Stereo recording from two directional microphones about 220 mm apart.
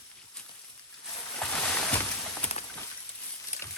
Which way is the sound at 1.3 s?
5° left (ahead or behind).